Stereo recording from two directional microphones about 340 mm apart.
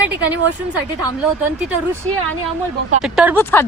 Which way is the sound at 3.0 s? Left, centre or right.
Centre.